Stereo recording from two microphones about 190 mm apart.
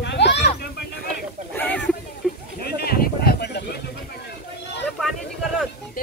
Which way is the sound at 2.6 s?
55° left (ahead or behind).